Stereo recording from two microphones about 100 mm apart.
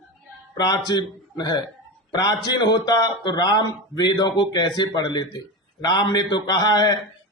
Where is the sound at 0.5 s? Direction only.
40° left (ahead or behind).